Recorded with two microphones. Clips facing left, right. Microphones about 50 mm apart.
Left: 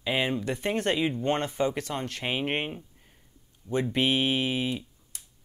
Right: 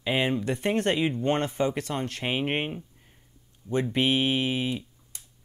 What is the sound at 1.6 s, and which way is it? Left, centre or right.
Speech, centre.